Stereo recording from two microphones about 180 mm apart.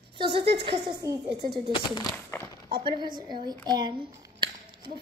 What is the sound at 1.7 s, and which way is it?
Speech, 25° left (ahead or behind).